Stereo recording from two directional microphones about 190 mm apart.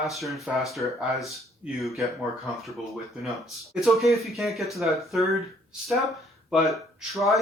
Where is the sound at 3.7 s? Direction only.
Centre (ahead or behind).